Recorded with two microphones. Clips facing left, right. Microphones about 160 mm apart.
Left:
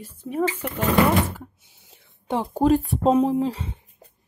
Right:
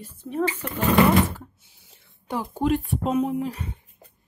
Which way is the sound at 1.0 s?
10° left (ahead or behind).